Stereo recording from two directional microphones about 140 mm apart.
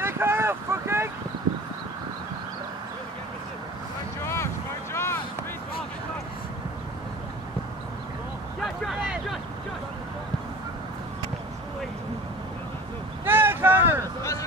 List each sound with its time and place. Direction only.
0.0 s vehicle: 15° right (ahead or behind)
4.9 s vehicle: 20° left (ahead or behind)
8.6 s a sound: centre (ahead or behind)
13.2 s vehicle: 15° right (ahead or behind)